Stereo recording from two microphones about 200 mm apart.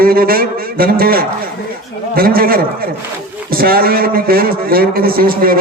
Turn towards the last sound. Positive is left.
turn(degrees=-45)  # may be behind; listen again after turning